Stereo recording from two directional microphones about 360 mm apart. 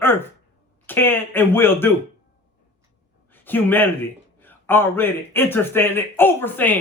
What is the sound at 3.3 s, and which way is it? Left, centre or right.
Speech, centre.